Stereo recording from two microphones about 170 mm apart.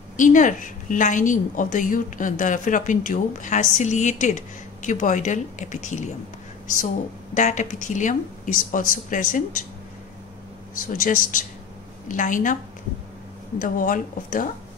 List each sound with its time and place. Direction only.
0.2 s a woman's voice: 50° left (ahead or behind)
7.3 s a woman's voice: 45° left (ahead or behind)
11.0 s a woman's voice: 50° left (ahead or behind)
13.6 s a woman's voice: 50° left (ahead or behind)